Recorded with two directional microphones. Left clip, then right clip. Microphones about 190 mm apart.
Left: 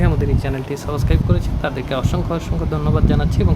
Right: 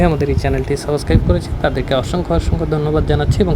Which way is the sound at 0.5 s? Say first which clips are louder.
Right 6 dB; 15° right (ahead or behind).